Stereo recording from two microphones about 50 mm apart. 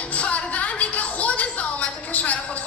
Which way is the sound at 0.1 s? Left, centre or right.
Left.